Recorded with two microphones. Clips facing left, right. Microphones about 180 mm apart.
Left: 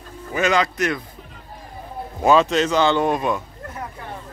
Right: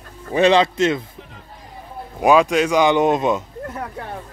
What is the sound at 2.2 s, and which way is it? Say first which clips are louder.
Speech: right 2 dB; 10° right (ahead or behind).